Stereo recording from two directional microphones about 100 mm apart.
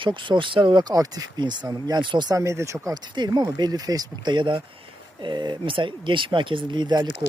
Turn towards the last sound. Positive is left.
turn(degrees=-50)  # may be behind; listen again after turning